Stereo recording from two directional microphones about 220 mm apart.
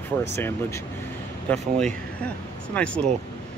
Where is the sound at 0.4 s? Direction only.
10° left (ahead or behind).